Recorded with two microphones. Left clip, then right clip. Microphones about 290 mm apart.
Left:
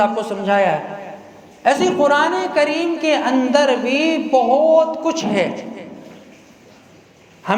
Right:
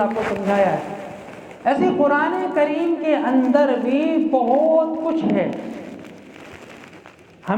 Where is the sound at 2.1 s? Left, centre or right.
Left.